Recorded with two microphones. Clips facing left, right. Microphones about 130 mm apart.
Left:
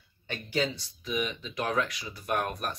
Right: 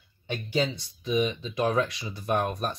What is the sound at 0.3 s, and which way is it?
Speech, 15° right (ahead or behind).